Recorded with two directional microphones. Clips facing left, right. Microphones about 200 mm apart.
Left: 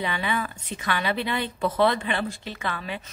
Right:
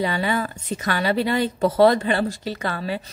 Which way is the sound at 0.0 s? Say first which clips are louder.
Right 5 dB; 40° right (ahead or behind).